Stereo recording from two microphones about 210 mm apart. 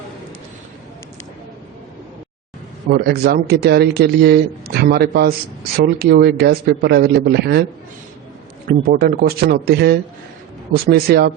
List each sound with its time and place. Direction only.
2.9 s speech: 45° right (ahead or behind)
8.9 s speech: 45° right (ahead or behind)